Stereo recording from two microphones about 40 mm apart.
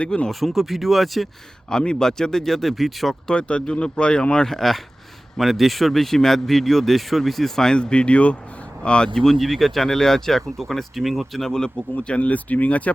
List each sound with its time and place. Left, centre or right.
0.3 s speech: centre
1.7 s speech: left; by 3.2 s centre
3.3 s speech: left
4.4 s speech: centre
7.8 s speech: left
9.1 s speech: centre
11.9 s speech: left